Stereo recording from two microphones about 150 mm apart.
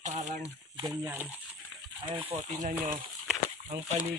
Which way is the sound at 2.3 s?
55° right (ahead or behind).